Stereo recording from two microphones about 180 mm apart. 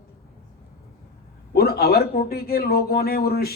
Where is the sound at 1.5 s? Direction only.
60° left (ahead or behind).